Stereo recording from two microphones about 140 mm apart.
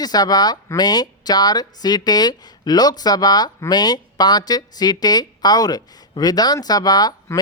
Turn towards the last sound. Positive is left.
turn(degrees=30)  # may be behind; listen again after turning